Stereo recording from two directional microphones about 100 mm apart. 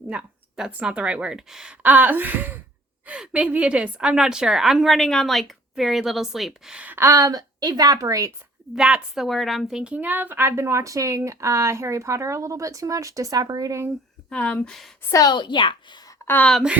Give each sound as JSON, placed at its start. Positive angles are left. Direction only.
{"t": 0.1, "sound": "a woman's voice", "side_deg": -10}
{"t": 1.8, "sound": "a woman's voice", "side_deg": -15}
{"t": 7.0, "sound": "speech", "side_deg": -35}
{"t": 8.7, "sound": "a woman's voice", "side_deg": -5}
{"t": 14.3, "sound": "speech", "side_deg": 10}
{"t": 15.1, "sound": "a woman's voice", "side_deg": 40}
{"t": 16.2, "sound": "speech", "side_deg": 20}